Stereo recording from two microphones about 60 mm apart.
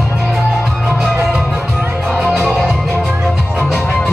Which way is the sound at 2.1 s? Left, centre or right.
Centre.